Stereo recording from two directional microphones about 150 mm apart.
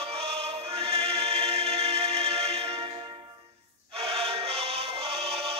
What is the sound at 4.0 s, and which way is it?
Music, 45° right (ahead or behind).